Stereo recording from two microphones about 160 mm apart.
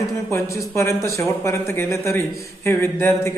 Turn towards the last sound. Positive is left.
turn(degrees=15)  # may be behind; listen again after turning